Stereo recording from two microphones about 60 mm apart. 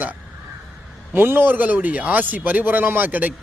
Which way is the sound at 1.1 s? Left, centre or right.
Right.